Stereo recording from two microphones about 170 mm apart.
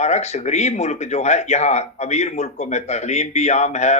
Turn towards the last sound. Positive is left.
turn(degrees=40)  # may be behind; listen again after turning